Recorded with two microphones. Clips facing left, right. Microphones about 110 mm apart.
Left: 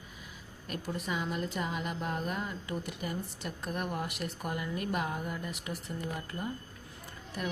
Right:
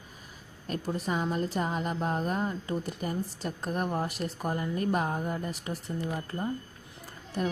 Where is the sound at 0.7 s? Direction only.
35° right (ahead or behind).